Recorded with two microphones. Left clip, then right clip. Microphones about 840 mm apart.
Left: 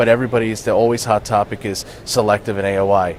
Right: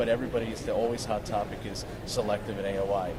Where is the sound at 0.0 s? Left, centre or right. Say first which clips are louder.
Left 13 dB; left.